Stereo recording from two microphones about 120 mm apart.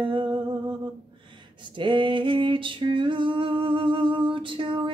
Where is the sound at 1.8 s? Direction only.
45° right (ahead or behind).